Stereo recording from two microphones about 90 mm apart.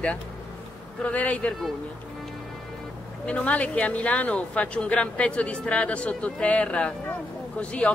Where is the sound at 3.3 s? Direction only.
15° left (ahead or behind).